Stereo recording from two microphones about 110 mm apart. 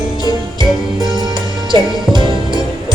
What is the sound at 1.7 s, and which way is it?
Music, 45° right (ahead or behind).